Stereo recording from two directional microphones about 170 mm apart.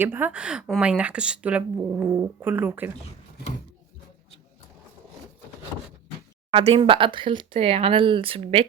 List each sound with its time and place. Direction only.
0.0 s a woman's voice: 10° right (ahead or behind)
6.5 s speech: 35° right (ahead or behind)